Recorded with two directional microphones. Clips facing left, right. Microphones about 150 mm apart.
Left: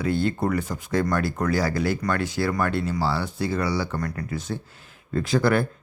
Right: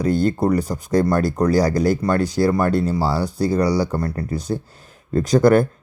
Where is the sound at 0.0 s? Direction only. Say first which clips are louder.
Right 5 dB; 40° right (ahead or behind).